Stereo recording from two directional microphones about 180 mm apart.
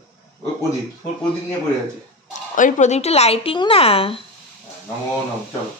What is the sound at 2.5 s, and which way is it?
Speech, 45° left (ahead or behind).